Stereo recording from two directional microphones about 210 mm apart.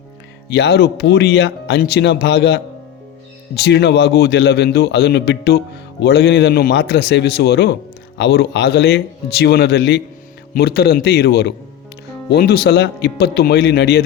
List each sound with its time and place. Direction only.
0.4 s speech: 55° left (ahead or behind)